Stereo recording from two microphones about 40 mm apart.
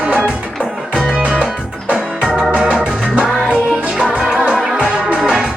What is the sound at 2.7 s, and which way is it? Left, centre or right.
Music, right.